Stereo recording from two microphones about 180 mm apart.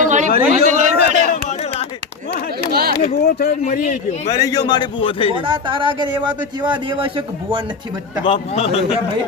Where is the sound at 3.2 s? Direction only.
60° left (ahead or behind); by 4.3 s 45° left (ahead or behind).